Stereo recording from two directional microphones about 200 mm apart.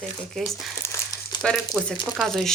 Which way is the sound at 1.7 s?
Centre (ahead or behind).